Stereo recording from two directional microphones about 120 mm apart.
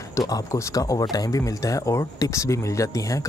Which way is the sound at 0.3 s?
30° left (ahead or behind).